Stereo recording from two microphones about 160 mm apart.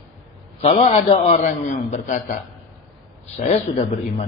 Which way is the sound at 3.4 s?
40° left (ahead or behind).